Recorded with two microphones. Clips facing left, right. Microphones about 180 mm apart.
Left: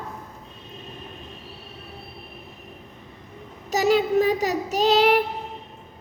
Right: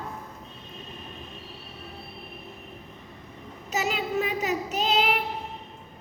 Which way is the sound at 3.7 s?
40° left (ahead or behind).